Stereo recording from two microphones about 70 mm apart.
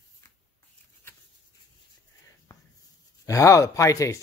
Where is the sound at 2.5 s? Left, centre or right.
Left.